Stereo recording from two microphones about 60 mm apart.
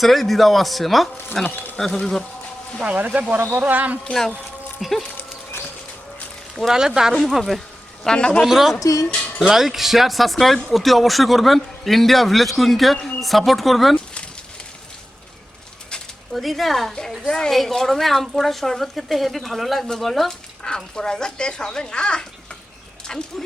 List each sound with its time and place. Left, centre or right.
0.0 s a woman's voice: centre
1.5 s speech: left
1.8 s a woman's voice: centre
2.8 s speech: right
4.0 s a woman's voice: centre
6.6 s a woman's voice: centre
8.0 s a woman's voice: centre
8.4 s a woman's voice: centre
8.8 s speech: left
9.4 s a woman's voice: centre
13.9 s a sound: centre
16.3 s a woman's voice: centre
17.2 s a woman's voice: centre